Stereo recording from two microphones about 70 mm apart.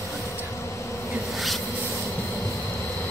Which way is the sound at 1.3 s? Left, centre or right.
Centre.